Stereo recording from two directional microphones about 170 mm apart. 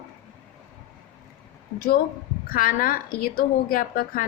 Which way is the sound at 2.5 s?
60° left (ahead or behind).